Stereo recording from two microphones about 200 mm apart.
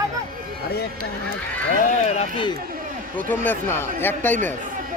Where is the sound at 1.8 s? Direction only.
30° left (ahead or behind).